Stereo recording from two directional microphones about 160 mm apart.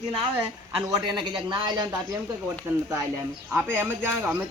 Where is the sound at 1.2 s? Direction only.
30° right (ahead or behind).